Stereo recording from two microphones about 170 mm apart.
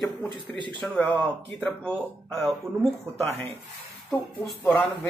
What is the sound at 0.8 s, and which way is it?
Speech, 5° left (ahead or behind).